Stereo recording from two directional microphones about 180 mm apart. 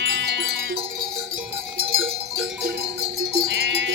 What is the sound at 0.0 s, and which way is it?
Music, 75° right (ahead or behind).